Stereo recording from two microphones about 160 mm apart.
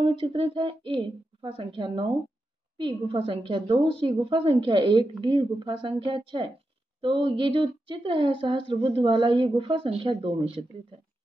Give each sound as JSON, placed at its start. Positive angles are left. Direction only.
{"t": 0.0, "sound": "a woman's voice", "side_deg": -35}